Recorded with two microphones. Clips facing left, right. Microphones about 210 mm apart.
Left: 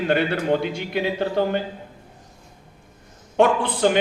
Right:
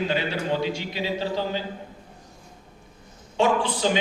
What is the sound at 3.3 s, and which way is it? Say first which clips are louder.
Speech: left 4 dB; 55° left (ahead or behind).